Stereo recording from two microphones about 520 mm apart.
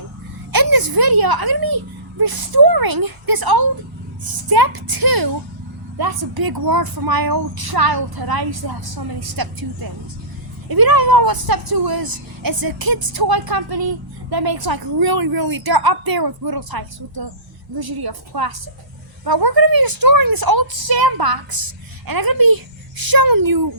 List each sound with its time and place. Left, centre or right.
0.5 s a woman's voice: right
10.7 s a woman's voice: right